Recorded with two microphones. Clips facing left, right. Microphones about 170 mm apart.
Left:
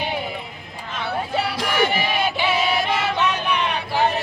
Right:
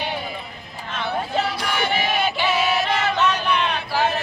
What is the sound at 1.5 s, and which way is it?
Music, 90° left.